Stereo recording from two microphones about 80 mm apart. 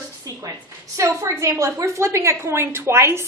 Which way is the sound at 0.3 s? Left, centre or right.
Right.